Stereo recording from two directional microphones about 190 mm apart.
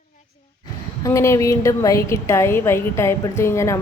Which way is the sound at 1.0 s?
15° left (ahead or behind).